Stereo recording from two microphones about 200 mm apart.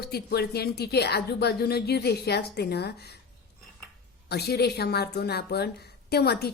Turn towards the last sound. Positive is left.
turn(degrees=50)  # may be behind; listen again after turning